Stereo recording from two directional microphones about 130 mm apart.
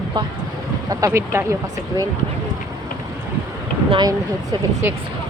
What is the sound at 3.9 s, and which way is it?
Speech, 30° right (ahead or behind).